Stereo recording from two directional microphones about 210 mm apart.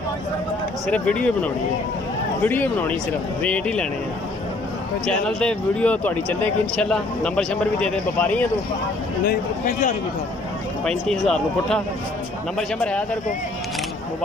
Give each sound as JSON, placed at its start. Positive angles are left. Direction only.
{"t": 0.8, "sound": "a man's voice", "side_deg": 5}
{"t": 5.0, "sound": "a man's voice", "side_deg": 5}
{"t": 9.2, "sound": "a man's voice", "side_deg": 45}
{"t": 10.9, "sound": "a man's voice", "side_deg": 0}